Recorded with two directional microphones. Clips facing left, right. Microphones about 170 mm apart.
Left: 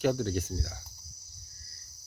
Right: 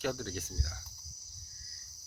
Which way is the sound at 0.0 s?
20° left (ahead or behind).